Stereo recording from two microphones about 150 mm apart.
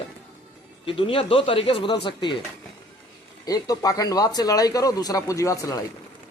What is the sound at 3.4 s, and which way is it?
A man's voice, 25° left (ahead or behind).